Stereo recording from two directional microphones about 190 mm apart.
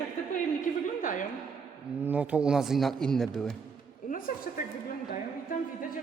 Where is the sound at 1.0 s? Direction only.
45° left (ahead or behind).